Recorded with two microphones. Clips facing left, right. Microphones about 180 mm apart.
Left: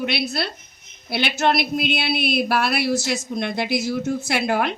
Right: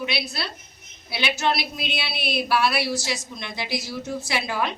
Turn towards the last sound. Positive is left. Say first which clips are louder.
# left 5 dB
turn(degrees=60)  # may be behind; listen again after turning